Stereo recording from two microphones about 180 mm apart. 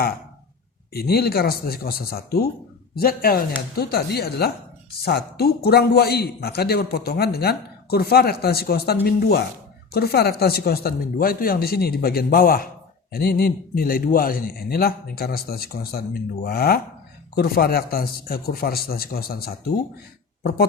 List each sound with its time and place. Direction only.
0.9 s a man's voice: 60° left (ahead or behind)